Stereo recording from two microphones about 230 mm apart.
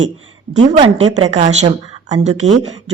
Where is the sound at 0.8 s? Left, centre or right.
Right.